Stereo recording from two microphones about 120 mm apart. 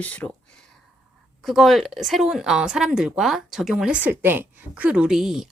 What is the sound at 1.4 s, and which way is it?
A woman's voice, centre (ahead or behind).